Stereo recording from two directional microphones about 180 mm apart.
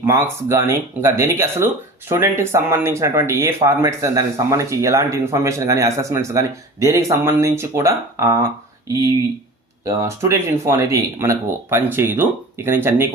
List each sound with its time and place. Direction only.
0.0 s speech: 15° right (ahead or behind)
9.8 s speech: 15° right (ahead or behind)